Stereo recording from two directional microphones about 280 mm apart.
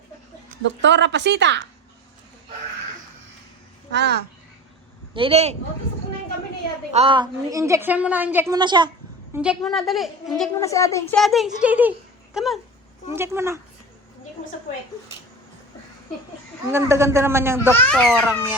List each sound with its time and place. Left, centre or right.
0.8 s speech: right
3.9 s speech: right
5.1 s speech: centre
6.9 s a woman's voice: centre
9.3 s a woman's voice: centre
16.7 s a woman's voice: centre
17.7 s a woman's voice: centre